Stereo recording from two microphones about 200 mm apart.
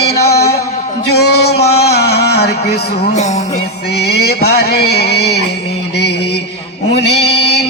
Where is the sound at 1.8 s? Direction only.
55° left (ahead or behind).